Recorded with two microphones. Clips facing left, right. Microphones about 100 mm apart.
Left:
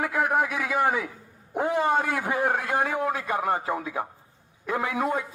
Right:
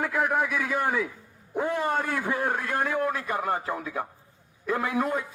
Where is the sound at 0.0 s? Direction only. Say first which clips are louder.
Left 1 dB; 5° left (ahead or behind).